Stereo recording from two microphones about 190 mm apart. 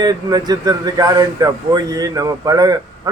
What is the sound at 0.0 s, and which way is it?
A man's voice, 20° right (ahead or behind).